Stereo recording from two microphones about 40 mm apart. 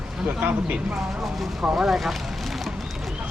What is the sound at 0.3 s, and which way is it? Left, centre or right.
Speech, right.